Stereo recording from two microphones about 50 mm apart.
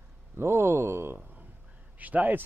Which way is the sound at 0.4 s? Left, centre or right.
Right.